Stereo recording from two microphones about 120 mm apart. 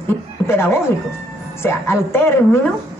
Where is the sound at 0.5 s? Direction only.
20° left (ahead or behind).